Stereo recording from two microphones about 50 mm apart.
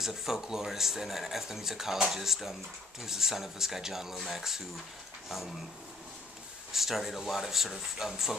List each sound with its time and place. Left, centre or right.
0.0 s speech: centre
6.7 s speech: centre